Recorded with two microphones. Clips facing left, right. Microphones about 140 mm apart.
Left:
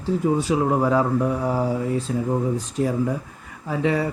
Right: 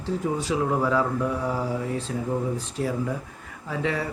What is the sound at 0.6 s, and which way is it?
Speech, 40° left (ahead or behind).